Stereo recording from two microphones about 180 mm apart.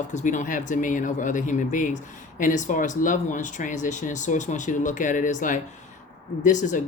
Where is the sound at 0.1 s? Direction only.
45° left (ahead or behind).